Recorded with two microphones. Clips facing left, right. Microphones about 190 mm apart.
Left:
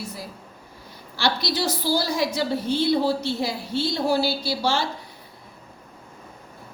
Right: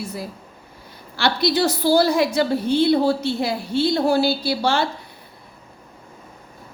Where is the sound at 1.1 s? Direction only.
55° right (ahead or behind).